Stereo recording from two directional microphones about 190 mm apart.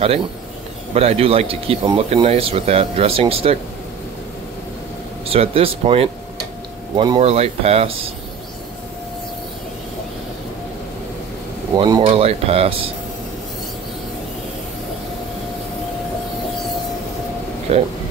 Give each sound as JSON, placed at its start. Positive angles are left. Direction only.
{"t": 0.9, "sound": "speech", "side_deg": -30}
{"t": 5.3, "sound": "speech", "side_deg": -30}
{"t": 11.7, "sound": "speech", "side_deg": -20}
{"t": 12.0, "sound": "speech", "side_deg": -35}
{"t": 17.7, "sound": "speech", "side_deg": -35}